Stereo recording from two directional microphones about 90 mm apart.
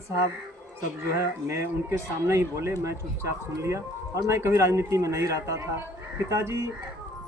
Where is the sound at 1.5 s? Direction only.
30° right (ahead or behind).